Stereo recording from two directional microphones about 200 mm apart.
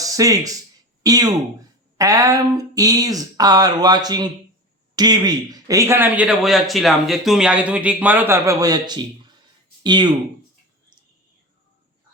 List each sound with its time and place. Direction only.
0.0 s a man's voice: 15° right (ahead or behind)